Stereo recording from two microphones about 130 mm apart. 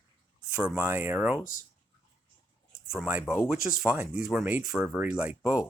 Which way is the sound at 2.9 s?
10° right (ahead or behind).